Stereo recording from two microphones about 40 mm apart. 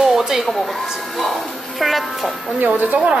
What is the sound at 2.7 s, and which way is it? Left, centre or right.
Speech, right.